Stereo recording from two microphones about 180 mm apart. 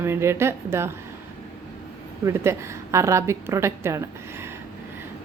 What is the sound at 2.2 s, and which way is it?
A woman's voice, 15° right (ahead or behind).